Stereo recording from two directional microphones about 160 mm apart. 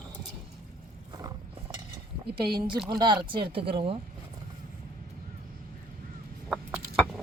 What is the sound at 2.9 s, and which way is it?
Speech, 30° right (ahead or behind).